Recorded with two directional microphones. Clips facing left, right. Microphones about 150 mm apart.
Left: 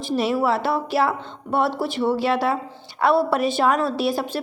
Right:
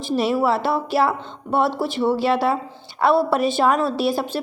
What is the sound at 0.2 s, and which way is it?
A woman's voice, 30° right (ahead or behind).